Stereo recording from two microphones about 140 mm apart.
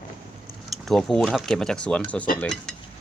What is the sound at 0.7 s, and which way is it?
Speech, centre (ahead or behind).